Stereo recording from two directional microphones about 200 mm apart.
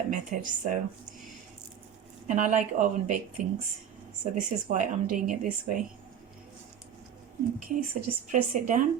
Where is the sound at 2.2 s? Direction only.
40° right (ahead or behind).